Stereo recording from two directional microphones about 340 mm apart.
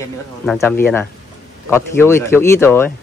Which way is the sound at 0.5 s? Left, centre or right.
Centre.